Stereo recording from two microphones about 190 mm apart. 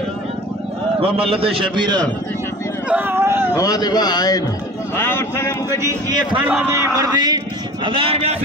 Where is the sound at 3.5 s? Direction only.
20° left (ahead or behind).